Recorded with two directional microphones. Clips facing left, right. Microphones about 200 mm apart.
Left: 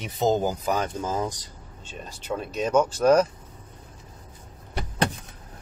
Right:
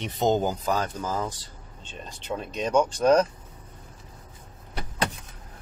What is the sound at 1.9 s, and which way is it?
Speech, 10° left (ahead or behind).